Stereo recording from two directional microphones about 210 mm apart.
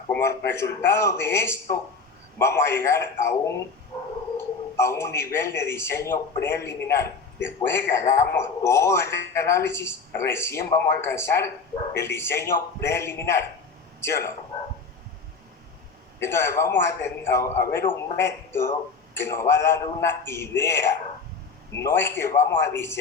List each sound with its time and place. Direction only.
0.1 s a man's voice: 10° left (ahead or behind)
3.9 s a sound: 25° left (ahead or behind)
4.4 s a man's voice: 15° left (ahead or behind)
16.2 s a man's voice: 15° left (ahead or behind)